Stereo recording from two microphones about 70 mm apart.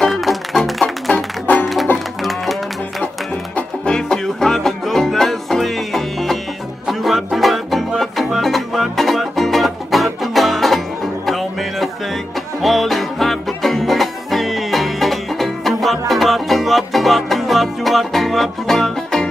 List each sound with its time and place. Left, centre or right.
0.0 s music: centre
3.5 s music: centre